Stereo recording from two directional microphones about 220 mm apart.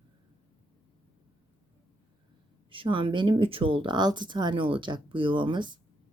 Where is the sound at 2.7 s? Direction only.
25° right (ahead or behind).